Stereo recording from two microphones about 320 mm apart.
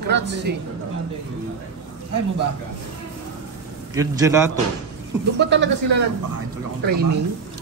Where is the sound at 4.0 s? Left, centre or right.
Centre.